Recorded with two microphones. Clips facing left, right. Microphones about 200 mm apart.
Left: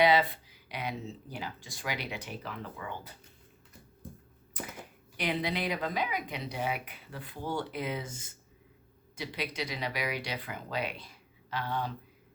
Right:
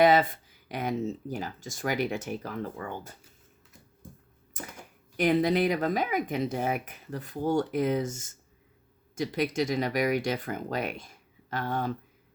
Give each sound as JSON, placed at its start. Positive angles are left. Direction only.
{"t": 0.0, "sound": "speech", "side_deg": -45}
{"t": 4.6, "sound": "speech", "side_deg": -45}